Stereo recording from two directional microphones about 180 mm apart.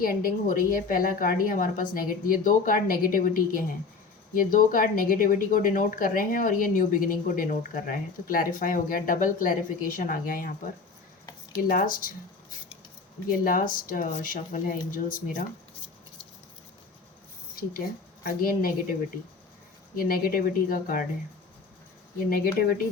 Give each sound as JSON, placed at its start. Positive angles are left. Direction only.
{"t": 0.0, "sound": "speech", "side_deg": 50}
{"t": 11.7, "sound": "speech", "side_deg": 50}
{"t": 13.4, "sound": "speech", "side_deg": 50}
{"t": 17.6, "sound": "speech", "side_deg": 55}
{"t": 20.1, "sound": "speech", "side_deg": 55}
{"t": 22.3, "sound": "speech", "side_deg": 55}